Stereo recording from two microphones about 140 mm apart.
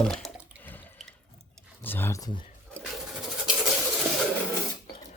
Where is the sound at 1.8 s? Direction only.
15° left (ahead or behind).